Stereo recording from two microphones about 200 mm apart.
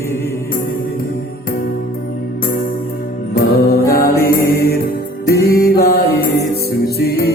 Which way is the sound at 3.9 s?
45° left (ahead or behind).